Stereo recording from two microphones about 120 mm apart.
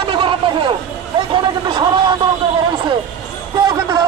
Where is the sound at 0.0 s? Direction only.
45° right (ahead or behind).